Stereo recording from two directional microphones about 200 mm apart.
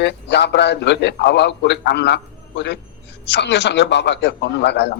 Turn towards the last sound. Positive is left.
turn(degrees=60)  # may be behind; listen again after turning